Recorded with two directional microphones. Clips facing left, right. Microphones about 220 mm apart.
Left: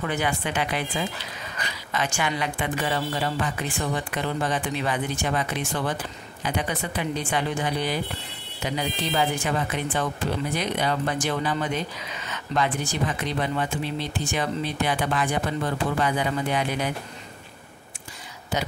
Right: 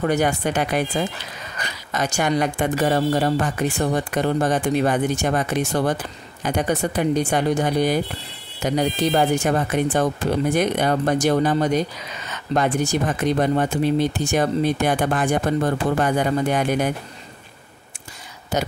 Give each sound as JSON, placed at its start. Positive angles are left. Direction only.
{"t": 0.0, "sound": "speech", "side_deg": -40}
{"t": 18.5, "sound": "speech", "side_deg": -45}